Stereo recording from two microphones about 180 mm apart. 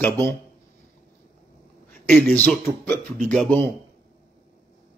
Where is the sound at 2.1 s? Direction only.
5° left (ahead or behind).